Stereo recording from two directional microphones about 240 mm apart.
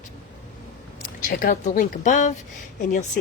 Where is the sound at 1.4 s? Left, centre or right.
Left.